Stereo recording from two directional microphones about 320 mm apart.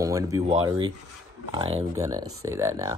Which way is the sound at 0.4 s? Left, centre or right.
Centre.